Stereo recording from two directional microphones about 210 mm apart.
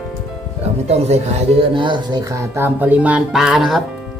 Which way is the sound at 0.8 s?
30° right (ahead or behind).